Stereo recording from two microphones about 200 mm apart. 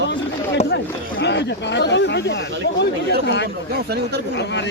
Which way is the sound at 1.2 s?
60° left (ahead or behind).